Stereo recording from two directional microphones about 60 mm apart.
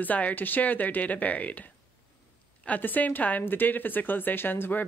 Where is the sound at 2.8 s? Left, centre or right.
Left.